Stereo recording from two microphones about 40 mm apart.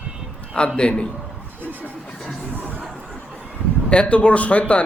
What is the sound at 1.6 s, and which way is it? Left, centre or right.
Music, right.